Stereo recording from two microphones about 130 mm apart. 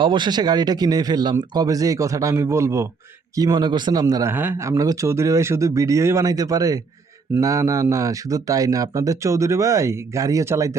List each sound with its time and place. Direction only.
0.0 s a man's voice: 35° right (ahead or behind)
4.3 s speech: 15° right (ahead or behind)